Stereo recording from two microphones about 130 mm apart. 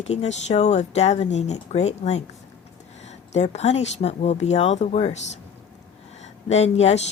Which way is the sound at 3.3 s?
60° left (ahead or behind).